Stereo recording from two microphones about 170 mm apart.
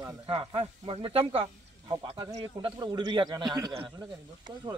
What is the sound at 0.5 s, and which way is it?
A man's voice, 30° right (ahead or behind).